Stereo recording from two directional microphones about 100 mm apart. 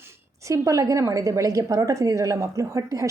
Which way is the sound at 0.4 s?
30° right (ahead or behind).